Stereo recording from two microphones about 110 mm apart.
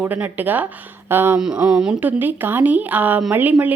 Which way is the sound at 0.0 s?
15° right (ahead or behind).